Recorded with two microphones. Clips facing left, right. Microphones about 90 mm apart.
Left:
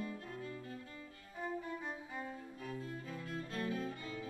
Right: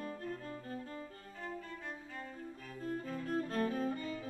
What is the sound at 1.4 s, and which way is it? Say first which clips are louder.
Violin: left 4 dB; 15° left (ahead or behind).